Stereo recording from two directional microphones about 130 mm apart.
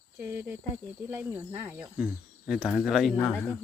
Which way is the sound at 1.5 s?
20° right (ahead or behind).